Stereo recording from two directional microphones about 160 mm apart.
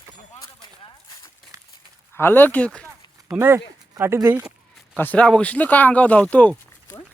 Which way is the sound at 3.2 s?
15° right (ahead or behind).